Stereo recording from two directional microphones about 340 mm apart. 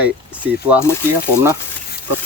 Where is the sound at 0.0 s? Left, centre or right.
Centre.